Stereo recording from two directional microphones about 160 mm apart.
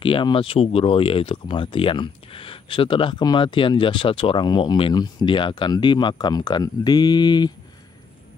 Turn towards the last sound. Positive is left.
turn(degrees=25)  # may be behind; listen again after turning